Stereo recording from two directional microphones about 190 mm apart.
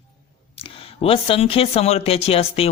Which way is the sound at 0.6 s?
30° left (ahead or behind).